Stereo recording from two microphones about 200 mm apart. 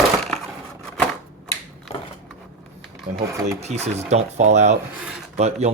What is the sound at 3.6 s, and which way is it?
Speech, 35° right (ahead or behind).